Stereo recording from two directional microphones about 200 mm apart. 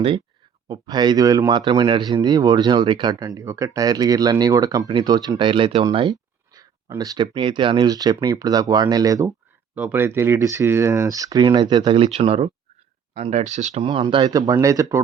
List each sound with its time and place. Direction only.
0.7 s a man's voice: 20° right (ahead or behind)
13.8 s speech: 25° right (ahead or behind)